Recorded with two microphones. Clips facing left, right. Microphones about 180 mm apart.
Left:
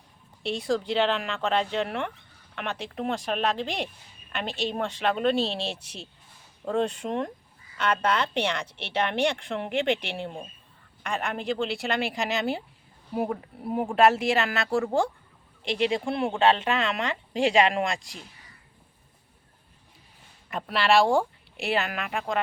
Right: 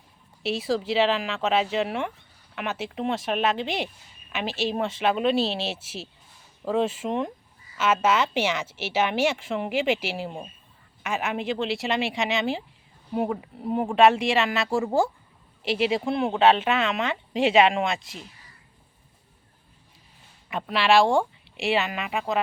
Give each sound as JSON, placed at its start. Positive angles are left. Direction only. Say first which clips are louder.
{"t": 0.4, "sound": "speech", "louder": "right 1 dB", "side_deg": -5}
{"t": 20.5, "sound": "speech", "louder": "right 2 dB", "side_deg": 0}